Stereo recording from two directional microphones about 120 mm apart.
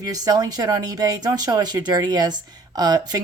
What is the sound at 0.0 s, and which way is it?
Speech, 30° right (ahead or behind).